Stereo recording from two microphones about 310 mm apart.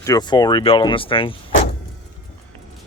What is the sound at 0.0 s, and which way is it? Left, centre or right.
Speech, centre.